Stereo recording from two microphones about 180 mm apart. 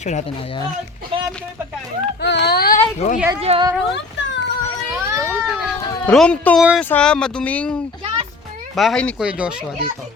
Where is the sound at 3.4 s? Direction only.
35° right (ahead or behind).